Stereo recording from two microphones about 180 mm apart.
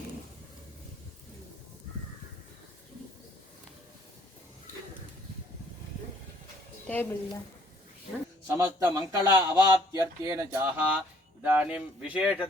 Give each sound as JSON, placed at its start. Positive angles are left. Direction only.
{"t": 6.8, "sound": "speech", "side_deg": 10}
{"t": 8.4, "sound": "a man's voice", "side_deg": -20}